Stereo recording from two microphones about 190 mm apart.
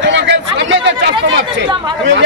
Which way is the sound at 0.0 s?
70° right (ahead or behind).